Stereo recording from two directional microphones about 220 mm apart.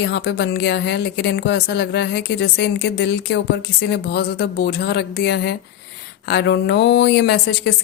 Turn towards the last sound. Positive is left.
turn(degrees=50)  # may be behind; listen again after turning